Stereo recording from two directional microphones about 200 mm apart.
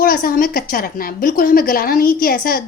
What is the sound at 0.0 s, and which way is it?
A woman's voice, 45° left (ahead or behind).